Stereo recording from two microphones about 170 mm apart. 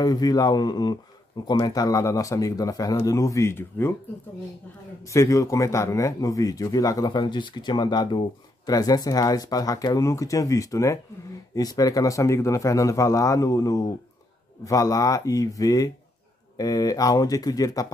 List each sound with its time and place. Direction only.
0.0 s speech: 20° left (ahead or behind)
5.1 s speech: 15° left (ahead or behind)